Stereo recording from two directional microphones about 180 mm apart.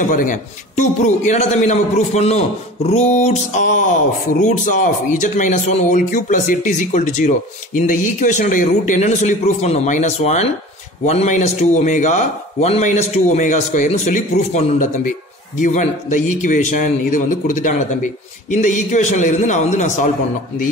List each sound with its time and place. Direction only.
0.0 s a man's voice: 45° left (ahead or behind)